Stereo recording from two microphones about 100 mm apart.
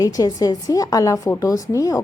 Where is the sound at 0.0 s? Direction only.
35° left (ahead or behind).